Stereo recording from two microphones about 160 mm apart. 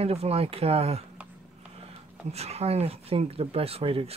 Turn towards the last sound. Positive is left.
turn(degrees=-35)  # may be behind; listen again after turning